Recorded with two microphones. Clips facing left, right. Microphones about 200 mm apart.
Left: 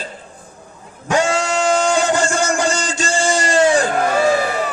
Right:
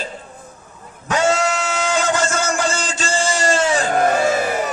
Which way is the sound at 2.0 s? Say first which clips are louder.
Left 2 dB; 15° left (ahead or behind).